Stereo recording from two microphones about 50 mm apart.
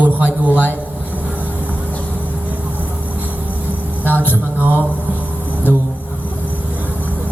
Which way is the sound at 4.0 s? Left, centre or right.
Left.